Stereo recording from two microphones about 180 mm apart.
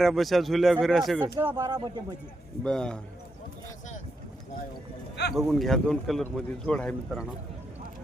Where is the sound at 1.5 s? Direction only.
20° right (ahead or behind).